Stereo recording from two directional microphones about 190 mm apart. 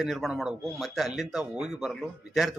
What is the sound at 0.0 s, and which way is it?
A man's voice, centre (ahead or behind).